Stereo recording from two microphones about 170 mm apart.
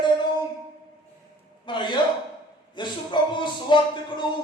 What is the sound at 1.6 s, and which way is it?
Speech, 25° left (ahead or behind).